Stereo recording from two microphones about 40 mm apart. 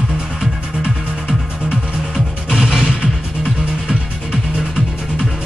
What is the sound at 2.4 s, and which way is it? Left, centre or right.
Music, centre.